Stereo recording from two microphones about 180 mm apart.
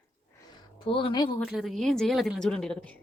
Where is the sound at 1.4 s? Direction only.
Centre (ahead or behind).